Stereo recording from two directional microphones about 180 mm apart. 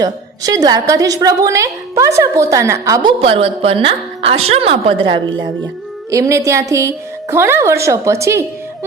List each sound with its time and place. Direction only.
0.0 s a woman's voice: 20° right (ahead or behind)